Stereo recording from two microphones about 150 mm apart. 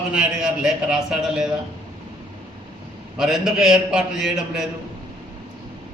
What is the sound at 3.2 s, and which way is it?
A man's voice, 5° right (ahead or behind).